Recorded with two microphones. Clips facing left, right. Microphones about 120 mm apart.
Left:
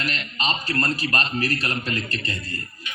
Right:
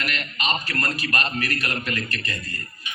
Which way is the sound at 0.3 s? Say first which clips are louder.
Left 2 dB; 30° left (ahead or behind).